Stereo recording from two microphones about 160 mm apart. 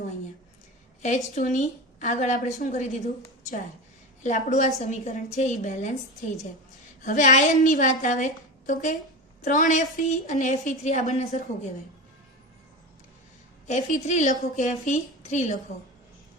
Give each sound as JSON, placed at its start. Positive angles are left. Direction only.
{"t": 1.0, "sound": "a woman's voice", "side_deg": 50}
{"t": 4.2, "sound": "a woman's voice", "side_deg": 50}
{"t": 7.0, "sound": "a woman's voice", "side_deg": 50}
{"t": 13.7, "sound": "a woman's voice", "side_deg": 50}